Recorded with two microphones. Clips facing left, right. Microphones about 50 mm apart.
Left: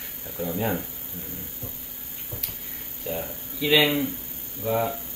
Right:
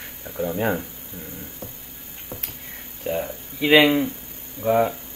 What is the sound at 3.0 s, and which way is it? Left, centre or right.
Speech, right.